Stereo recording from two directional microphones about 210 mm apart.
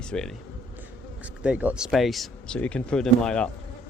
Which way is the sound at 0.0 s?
5° left (ahead or behind).